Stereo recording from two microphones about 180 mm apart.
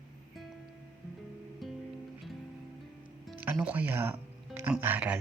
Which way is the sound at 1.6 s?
Centre (ahead or behind).